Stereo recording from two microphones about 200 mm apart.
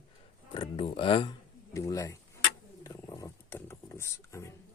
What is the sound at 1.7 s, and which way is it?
Speech, 15° left (ahead or behind).